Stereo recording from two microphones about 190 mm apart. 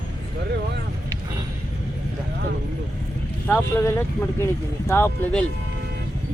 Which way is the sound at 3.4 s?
10° left (ahead or behind).